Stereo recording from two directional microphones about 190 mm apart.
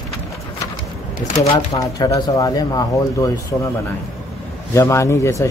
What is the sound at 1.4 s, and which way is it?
Speech, 20° left (ahead or behind).